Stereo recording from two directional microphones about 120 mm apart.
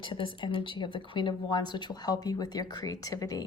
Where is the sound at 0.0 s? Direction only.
45° left (ahead or behind).